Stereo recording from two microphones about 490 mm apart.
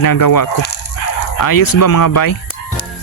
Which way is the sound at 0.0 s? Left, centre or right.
Left.